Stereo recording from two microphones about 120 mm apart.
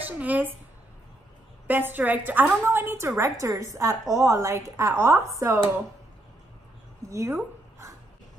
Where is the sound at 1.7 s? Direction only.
15° right (ahead or behind).